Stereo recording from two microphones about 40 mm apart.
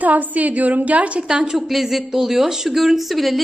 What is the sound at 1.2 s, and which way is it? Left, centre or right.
Speech, centre.